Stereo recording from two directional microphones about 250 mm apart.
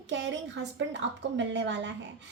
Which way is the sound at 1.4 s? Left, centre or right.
Right.